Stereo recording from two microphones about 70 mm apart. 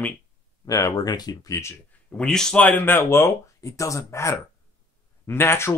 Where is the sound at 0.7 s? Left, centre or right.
Left.